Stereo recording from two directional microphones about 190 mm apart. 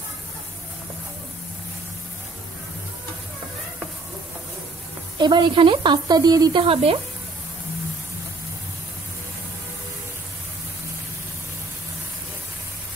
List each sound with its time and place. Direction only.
5.1 s a woman's voice: 25° right (ahead or behind)